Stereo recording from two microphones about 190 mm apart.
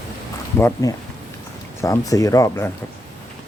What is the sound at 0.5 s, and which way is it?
Speech, 15° left (ahead or behind).